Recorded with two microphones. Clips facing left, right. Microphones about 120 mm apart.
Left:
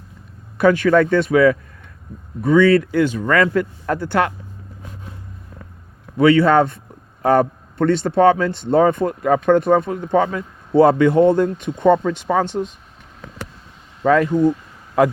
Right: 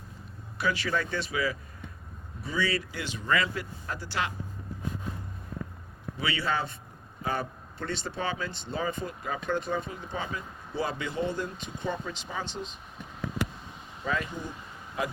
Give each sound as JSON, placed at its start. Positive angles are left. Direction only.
{"t": 0.6, "sound": "speech", "side_deg": 50}
{"t": 6.1, "sound": "speech", "side_deg": 55}
{"t": 14.0, "sound": "speech", "side_deg": 75}